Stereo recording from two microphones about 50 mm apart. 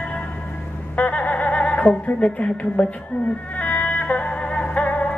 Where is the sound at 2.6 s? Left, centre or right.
Left.